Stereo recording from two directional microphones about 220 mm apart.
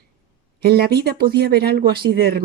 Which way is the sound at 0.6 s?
45° right (ahead or behind).